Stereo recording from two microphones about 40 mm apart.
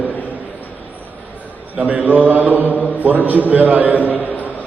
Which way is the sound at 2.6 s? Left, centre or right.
Left.